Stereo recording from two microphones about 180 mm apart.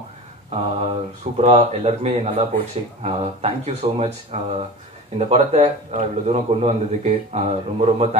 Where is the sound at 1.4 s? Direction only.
35° right (ahead or behind).